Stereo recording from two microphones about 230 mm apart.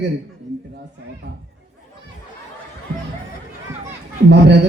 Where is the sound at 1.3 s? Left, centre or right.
Right.